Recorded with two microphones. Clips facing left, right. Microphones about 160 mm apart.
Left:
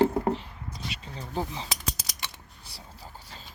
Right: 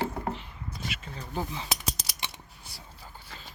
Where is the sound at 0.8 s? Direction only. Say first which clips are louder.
Left 1 dB; 30° left (ahead or behind).